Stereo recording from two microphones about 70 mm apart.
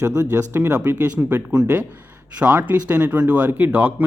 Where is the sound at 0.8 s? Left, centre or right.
Right.